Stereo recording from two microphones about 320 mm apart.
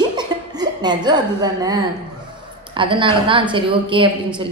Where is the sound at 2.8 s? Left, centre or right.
Centre.